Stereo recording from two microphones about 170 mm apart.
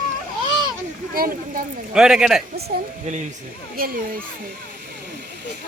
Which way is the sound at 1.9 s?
5° right (ahead or behind).